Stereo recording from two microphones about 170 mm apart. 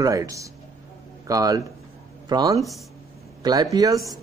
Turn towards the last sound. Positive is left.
turn(degrees=-20)  # may be behind; listen again after turning